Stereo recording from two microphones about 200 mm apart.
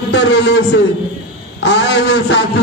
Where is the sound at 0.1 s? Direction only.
60° left (ahead or behind).